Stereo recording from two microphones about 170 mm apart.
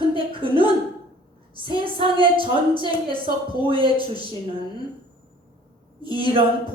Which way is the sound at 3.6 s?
30° right (ahead or behind).